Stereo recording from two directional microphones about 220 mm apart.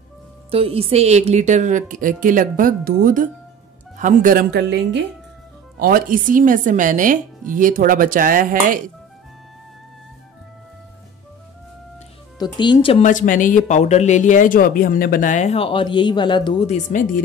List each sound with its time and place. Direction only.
0.5 s a woman's voice: 25° right (ahead or behind)
12.4 s speech: 20° left (ahead or behind)